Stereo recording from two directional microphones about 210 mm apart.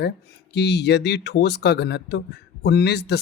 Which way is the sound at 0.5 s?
55° left (ahead or behind).